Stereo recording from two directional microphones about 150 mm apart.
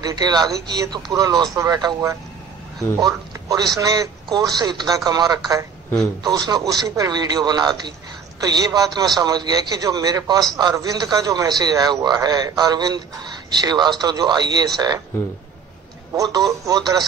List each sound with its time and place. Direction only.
0.0 s a man's voice: 25° right (ahead or behind)
16.1 s a man's voice: 25° right (ahead or behind)